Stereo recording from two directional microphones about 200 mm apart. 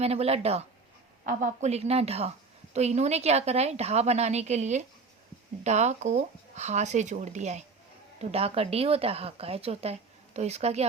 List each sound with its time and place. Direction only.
0.0 s speech: 30° right (ahead or behind)